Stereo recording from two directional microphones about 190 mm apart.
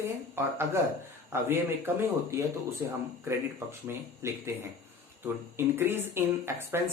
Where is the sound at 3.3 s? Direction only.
15° right (ahead or behind).